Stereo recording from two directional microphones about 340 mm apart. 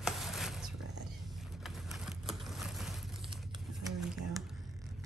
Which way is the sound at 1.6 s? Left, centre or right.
Centre.